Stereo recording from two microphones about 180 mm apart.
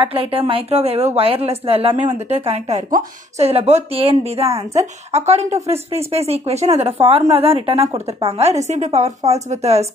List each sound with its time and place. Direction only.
0.0 s a woman's voice: 30° right (ahead or behind)